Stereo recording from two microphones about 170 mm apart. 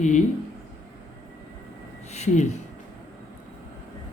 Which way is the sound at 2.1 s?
40° left (ahead or behind).